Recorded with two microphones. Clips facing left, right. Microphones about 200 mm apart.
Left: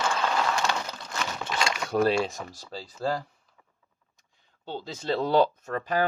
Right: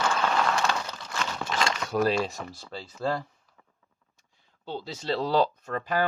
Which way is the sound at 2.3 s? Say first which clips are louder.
Even; 40° left (ahead or behind).